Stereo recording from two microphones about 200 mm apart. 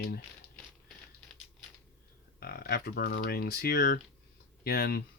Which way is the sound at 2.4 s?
50° left (ahead or behind).